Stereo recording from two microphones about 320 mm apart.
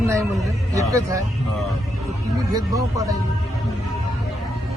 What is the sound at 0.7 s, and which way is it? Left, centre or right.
Speech, centre.